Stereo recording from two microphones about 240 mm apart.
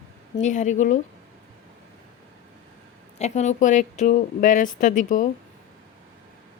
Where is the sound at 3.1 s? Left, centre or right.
Left.